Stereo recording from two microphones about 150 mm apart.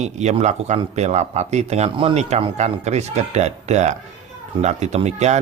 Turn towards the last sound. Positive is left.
turn(degrees=-50)  # may be behind; listen again after turning